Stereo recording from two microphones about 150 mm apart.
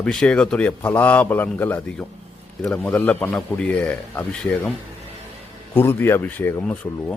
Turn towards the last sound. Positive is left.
turn(degrees=10)  # may be behind; listen again after turning